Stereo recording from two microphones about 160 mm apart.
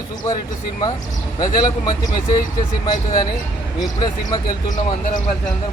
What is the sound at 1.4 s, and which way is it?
Speech, 25° left (ahead or behind).